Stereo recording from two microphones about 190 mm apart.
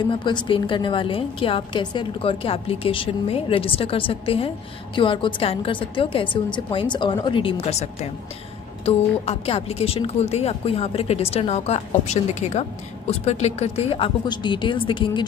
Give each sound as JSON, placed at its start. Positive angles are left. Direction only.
{"t": 0.0, "sound": "a woman's voice", "side_deg": 25}